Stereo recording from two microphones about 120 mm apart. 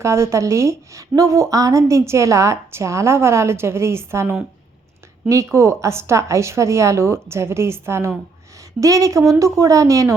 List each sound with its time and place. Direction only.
0.0 s a woman's voice: 25° right (ahead or behind)